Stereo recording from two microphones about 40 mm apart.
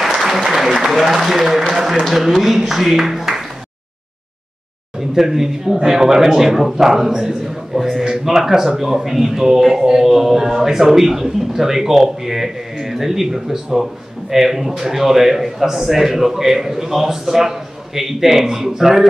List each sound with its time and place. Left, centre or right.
0.3 s applause: centre
2.2 s speech: centre
5.1 s a man's voice: centre